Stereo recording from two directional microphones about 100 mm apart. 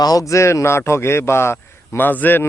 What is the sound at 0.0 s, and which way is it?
Speech, 40° left (ahead or behind).